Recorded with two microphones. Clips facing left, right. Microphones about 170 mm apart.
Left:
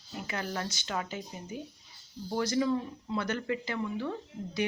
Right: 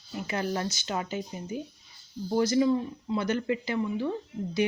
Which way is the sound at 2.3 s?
20° right (ahead or behind).